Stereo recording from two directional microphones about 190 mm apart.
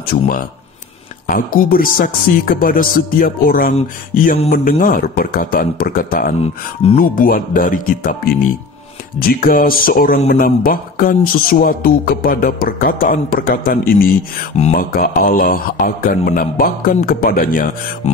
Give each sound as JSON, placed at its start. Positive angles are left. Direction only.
{"t": 0.0, "sound": "speech", "side_deg": 50}
{"t": 6.4, "sound": "speech", "side_deg": 35}
{"t": 7.0, "sound": "speech", "side_deg": 45}